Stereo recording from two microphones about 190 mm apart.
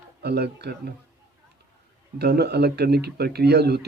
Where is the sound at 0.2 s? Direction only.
60° right (ahead or behind).